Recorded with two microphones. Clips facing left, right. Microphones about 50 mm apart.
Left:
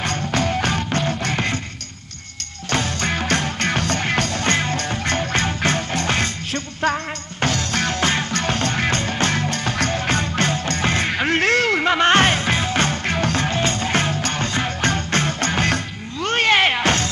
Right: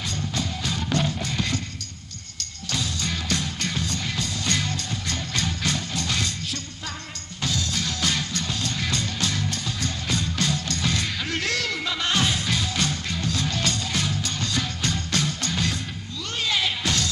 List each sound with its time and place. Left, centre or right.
0.0 s music: left
2.7 s music: left